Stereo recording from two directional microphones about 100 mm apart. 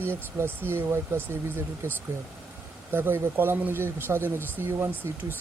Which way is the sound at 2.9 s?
20° right (ahead or behind).